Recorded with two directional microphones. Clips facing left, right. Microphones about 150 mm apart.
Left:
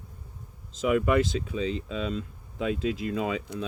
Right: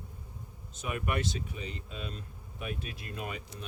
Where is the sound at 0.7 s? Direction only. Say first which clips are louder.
Left 11 dB; 90° left.